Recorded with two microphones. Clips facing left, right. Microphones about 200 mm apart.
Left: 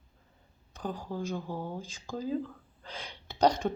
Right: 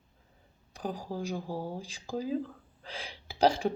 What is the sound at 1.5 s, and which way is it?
Speech, 35° right (ahead or behind).